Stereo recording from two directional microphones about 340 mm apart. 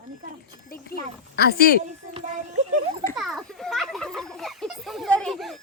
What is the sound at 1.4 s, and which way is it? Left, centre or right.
Speech, left.